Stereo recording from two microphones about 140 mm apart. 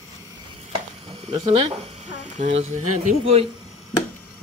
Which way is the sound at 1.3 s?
45° right (ahead or behind).